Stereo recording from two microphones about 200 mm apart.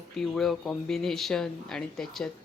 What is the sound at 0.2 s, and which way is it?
Speech, centre (ahead or behind).